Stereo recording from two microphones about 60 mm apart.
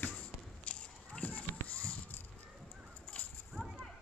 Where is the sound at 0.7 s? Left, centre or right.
Centre.